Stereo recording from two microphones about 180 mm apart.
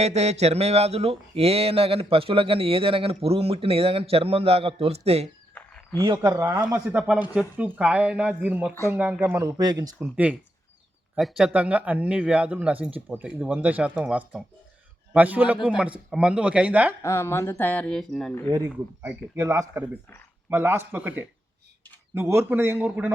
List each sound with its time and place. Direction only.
0.0 s speech: 35° right (ahead or behind)
5.5 s frog: 10° left (ahead or behind)
6.0 s a man's voice: 20° right (ahead or behind)
6.9 s a man's voice: 5° right (ahead or behind)
11.2 s a man's voice: centre (ahead or behind)
17.0 s speech: 15° left (ahead or behind)
18.4 s a man's voice: 20° right (ahead or behind)